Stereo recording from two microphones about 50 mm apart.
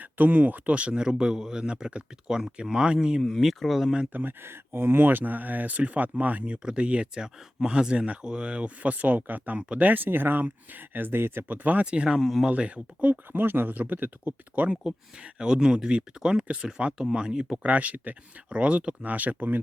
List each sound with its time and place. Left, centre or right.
0.0 s speech: right; by 3.2 s centre
3.2 s speech: centre
4.1 s speech: right
4.4 s speech: right
11.4 s speech: right
11.9 s speech: centre
12.2 s speech: centre
12.5 s speech: right
15.2 s speech: centre
17.6 s speech: right